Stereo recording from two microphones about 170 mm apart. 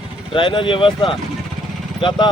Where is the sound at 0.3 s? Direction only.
30° left (ahead or behind).